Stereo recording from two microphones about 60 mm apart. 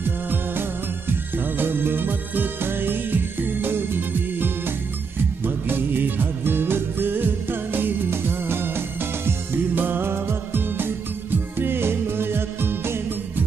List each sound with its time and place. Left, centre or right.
0.3 s music: right